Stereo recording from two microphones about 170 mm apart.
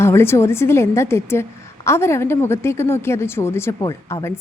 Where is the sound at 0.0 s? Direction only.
15° left (ahead or behind).